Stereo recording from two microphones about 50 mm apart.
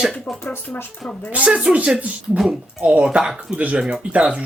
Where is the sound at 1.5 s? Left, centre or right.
Centre.